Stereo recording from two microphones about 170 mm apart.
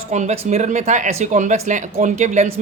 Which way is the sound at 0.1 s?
45° right (ahead or behind).